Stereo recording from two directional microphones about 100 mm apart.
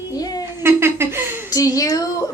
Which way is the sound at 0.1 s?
40° left (ahead or behind).